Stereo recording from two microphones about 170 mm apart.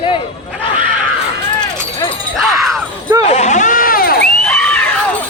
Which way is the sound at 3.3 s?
45° left (ahead or behind).